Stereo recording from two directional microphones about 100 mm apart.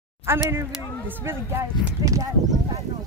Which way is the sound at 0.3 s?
25° right (ahead or behind).